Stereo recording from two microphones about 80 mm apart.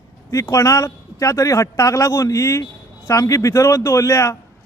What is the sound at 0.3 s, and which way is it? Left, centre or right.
A man's voice, left.